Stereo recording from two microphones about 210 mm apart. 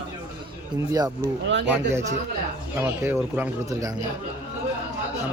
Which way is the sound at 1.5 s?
55° right (ahead or behind).